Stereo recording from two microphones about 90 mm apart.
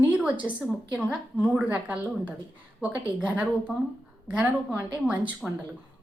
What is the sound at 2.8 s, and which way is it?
A woman's voice, 15° right (ahead or behind).